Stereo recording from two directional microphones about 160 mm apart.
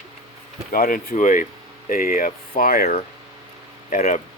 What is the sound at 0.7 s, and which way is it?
Speech, 60° left (ahead or behind).